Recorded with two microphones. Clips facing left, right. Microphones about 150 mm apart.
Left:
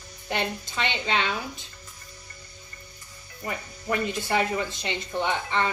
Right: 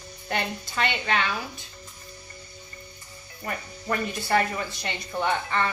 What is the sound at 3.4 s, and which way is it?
Speech, 15° left (ahead or behind).